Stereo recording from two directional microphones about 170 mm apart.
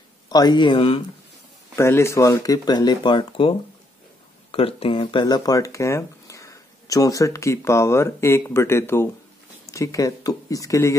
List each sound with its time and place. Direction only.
0.3 s speech: 25° left (ahead or behind)
1.8 s speech: 15° left (ahead or behind)